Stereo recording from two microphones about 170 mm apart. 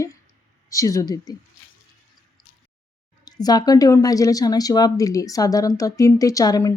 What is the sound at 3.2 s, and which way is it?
Speech, 25° left (ahead or behind).